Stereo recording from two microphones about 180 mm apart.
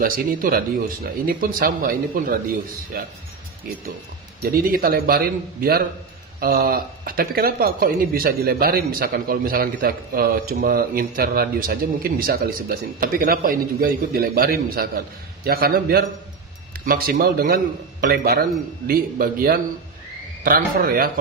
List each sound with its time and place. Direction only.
0.0 s speech: 50° right (ahead or behind)
4.4 s speech: 55° right (ahead or behind)